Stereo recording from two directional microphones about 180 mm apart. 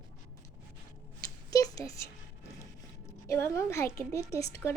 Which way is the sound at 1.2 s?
20° left (ahead or behind).